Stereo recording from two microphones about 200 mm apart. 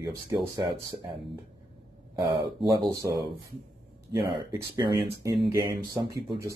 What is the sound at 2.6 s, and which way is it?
Speech, 15° right (ahead or behind).